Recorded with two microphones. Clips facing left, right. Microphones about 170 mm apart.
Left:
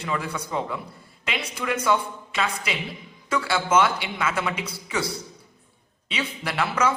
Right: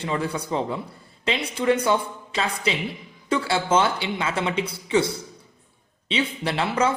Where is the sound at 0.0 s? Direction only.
30° right (ahead or behind).